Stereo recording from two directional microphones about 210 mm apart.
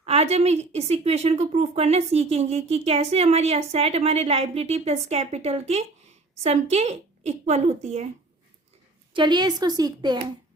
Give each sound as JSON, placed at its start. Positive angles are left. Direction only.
{"t": 0.0, "sound": "a woman's voice", "side_deg": -30}
{"t": 9.1, "sound": "a woman's voice", "side_deg": -20}